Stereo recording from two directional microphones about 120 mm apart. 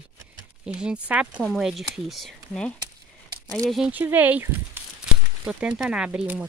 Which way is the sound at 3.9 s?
15° right (ahead or behind).